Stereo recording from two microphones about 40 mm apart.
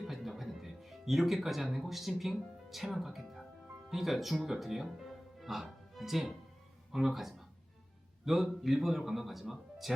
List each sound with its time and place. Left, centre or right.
0.1 s speech: centre
5.6 s music: centre
6.9 s a man's voice: centre